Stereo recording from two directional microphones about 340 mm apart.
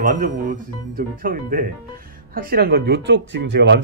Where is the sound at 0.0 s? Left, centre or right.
Right.